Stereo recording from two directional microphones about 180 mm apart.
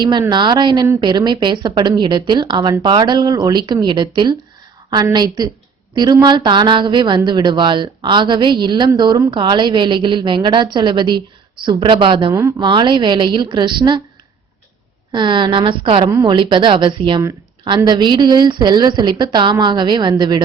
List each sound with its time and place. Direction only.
0.0 s a woman's voice: 20° right (ahead or behind)
12.4 s a woman's voice: 15° right (ahead or behind)
15.1 s a woman's voice: 25° right (ahead or behind)